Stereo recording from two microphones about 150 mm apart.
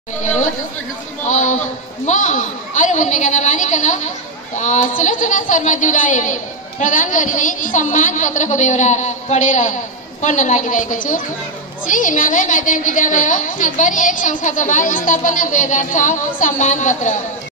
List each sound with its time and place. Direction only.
0.2 s chatter: 55° left (ahead or behind)
1.2 s a man's voice: 55° left (ahead or behind)